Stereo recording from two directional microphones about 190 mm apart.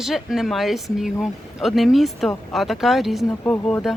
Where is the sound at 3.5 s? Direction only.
10° left (ahead or behind).